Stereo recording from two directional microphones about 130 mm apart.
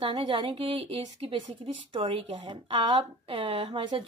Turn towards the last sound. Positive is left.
turn(degrees=-40)  # may be behind; listen again after turning